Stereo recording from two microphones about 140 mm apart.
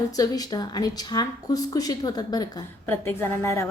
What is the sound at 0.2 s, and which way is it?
A woman's voice, 25° left (ahead or behind).